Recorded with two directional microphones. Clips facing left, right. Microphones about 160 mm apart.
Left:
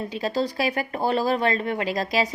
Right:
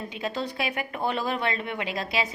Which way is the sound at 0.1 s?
35° left (ahead or behind).